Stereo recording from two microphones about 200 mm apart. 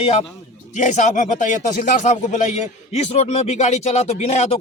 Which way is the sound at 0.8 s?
35° left (ahead or behind).